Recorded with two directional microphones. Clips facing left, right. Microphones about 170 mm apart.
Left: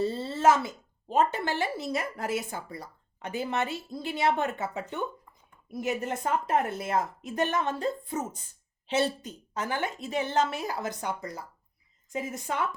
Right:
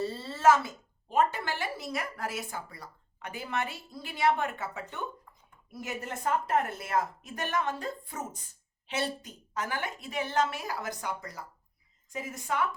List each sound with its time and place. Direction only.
0.3 s a woman's voice: 20° left (ahead or behind)